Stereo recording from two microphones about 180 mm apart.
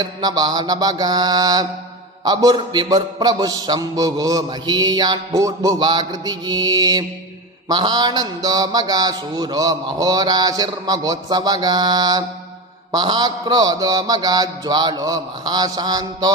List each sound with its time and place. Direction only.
0.0 s a man's voice: 20° right (ahead or behind)